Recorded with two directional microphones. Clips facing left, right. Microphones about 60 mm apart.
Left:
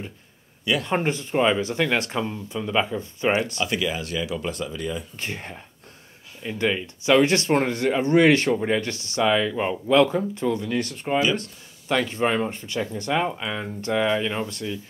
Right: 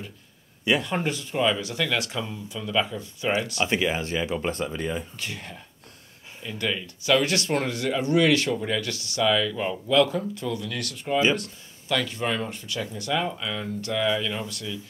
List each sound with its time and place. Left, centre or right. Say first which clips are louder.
0.8 s speech: left 4 dB; left
3.5 s speech: right 1 dB; right
5.1 s speech: left 3 dB; left